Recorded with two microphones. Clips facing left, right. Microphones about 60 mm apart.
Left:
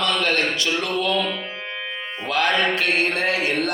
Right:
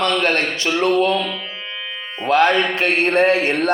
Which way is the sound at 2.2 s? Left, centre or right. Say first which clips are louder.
Right 6 dB; right.